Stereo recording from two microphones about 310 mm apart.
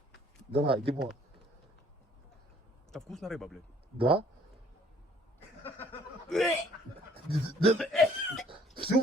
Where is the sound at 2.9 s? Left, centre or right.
Centre.